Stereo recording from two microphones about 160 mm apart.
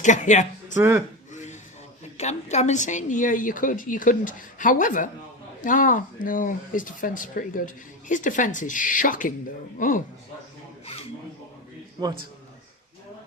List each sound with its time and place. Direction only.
0.0 s speech: 50° left (ahead or behind)
0.7 s speech: 15° right (ahead or behind)
1.3 s a sound: 50° left (ahead or behind)
2.1 s speech: 45° left (ahead or behind)